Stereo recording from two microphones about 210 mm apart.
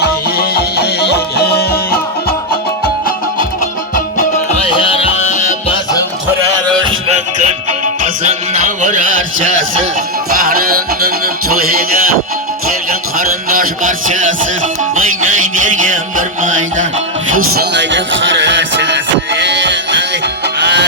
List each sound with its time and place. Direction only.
0.0 s music: 50° left (ahead or behind)
4.7 s music: 25° left (ahead or behind)
8.0 s music: 35° right (ahead or behind)
10.5 s music: 45° right (ahead or behind)
13.1 s a sound: 40° right (ahead or behind)
15.6 s music: 40° right (ahead or behind)
17.5 s music: 50° right (ahead or behind)